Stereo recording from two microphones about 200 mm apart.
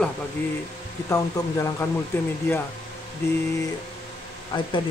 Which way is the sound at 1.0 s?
15° left (ahead or behind).